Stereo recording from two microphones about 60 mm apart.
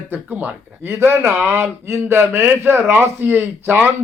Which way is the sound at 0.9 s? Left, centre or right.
Right.